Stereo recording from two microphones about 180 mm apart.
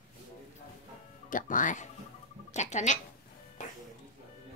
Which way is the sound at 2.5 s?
40° left (ahead or behind).